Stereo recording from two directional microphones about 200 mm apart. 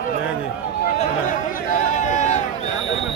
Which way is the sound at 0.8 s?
45° left (ahead or behind).